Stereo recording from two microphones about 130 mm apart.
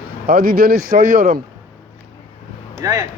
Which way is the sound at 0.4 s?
90° right.